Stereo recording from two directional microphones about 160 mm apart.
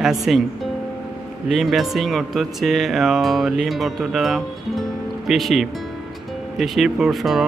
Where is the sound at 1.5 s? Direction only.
Centre (ahead or behind).